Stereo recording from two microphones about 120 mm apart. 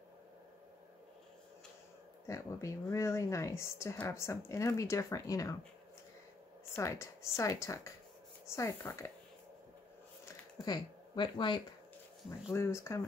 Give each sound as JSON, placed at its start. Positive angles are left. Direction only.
{"t": 2.2, "sound": "speech", "side_deg": 25}
{"t": 6.7, "sound": "speech", "side_deg": 25}
{"t": 10.2, "sound": "a sound", "side_deg": 35}
{"t": 12.5, "sound": "speech", "side_deg": 20}